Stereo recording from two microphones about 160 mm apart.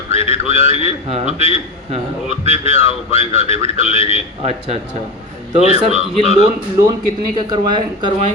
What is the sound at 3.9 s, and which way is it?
Speech, 35° left (ahead or behind).